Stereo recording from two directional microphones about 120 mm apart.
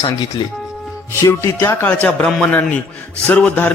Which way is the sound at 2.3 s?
10° left (ahead or behind).